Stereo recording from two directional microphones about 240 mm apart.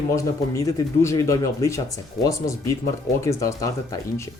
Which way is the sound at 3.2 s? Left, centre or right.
Centre.